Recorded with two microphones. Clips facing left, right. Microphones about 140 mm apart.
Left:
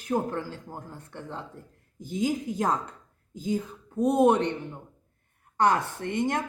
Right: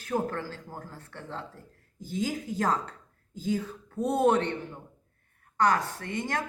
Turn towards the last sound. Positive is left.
turn(degrees=20)  # may be behind; listen again after turning